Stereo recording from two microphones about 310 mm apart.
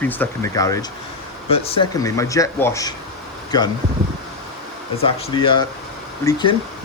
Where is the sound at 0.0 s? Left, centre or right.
Centre.